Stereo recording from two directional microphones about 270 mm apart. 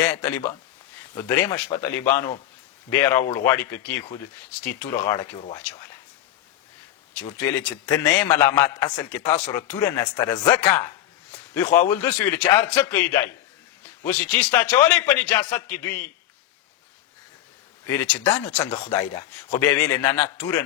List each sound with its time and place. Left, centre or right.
0.0 s a man's voice: centre
7.3 s a man's voice: centre
17.8 s a man's voice: centre